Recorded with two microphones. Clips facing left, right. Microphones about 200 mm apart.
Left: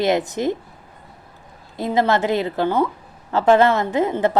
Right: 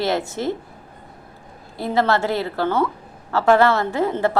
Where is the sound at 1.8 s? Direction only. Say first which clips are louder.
Left 1 dB; 15° left (ahead or behind).